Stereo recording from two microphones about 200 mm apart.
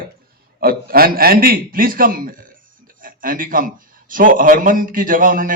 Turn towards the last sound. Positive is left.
turn(degrees=-45)  # may be behind; listen again after turning